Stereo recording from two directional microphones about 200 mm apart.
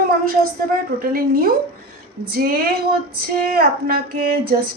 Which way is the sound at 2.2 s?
50° right (ahead or behind).